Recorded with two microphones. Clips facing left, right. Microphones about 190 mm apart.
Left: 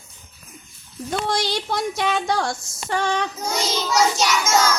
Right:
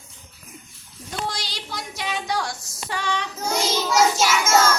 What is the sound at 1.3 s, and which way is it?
Child singing, 55° left (ahead or behind).